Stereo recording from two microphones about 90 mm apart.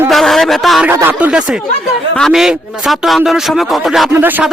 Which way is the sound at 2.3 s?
5° right (ahead or behind).